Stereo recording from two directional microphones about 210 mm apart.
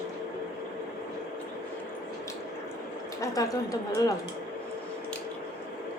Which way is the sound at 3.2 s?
15° left (ahead or behind).